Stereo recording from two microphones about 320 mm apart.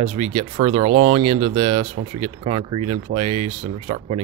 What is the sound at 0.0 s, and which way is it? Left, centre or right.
Speech, centre.